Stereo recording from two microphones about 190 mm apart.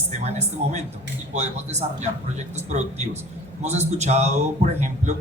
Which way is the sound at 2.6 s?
35° right (ahead or behind).